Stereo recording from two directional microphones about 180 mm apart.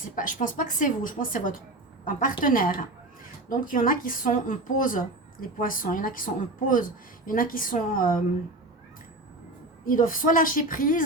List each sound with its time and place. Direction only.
0.2 s speech: 45° left (ahead or behind)
9.8 s speech: 50° left (ahead or behind)